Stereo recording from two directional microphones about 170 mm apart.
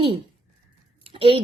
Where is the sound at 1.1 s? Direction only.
35° right (ahead or behind).